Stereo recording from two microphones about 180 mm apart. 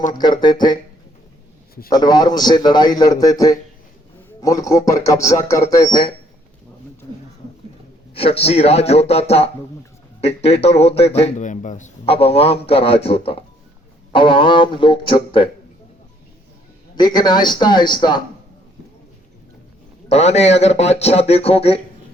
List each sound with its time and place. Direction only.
0.1 s a man's voice: 25° left (ahead or behind)
1.9 s a man's voice: 20° left (ahead or behind)
8.1 s a man's voice: 30° left (ahead or behind)
16.9 s a man's voice: 25° left (ahead or behind)
20.1 s a man's voice: 35° left (ahead or behind)